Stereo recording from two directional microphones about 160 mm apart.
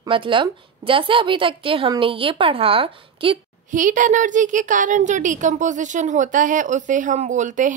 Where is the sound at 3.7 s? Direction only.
55° right (ahead or behind).